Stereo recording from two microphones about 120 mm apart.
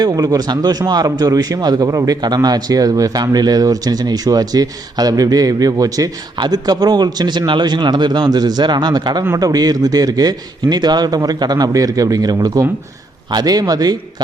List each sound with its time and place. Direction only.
0.0 s a man's voice: 30° right (ahead or behind)